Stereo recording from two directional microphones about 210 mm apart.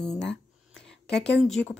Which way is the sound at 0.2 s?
55° left (ahead or behind).